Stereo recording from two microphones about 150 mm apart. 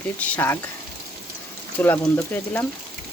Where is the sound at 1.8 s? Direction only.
15° left (ahead or behind).